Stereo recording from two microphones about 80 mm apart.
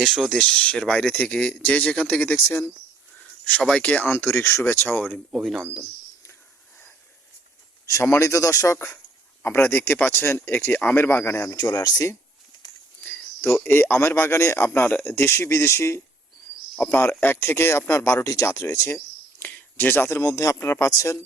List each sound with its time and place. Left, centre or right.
0.0 s speech: centre
0.3 s speech: centre
3.4 s speech: centre
4.1 s speech: left
5.1 s speech: centre
8.2 s speech: left
9.4 s speech: left
11.8 s speech: left
13.0 s speech: centre; by 18.9 s left
19.4 s speech: left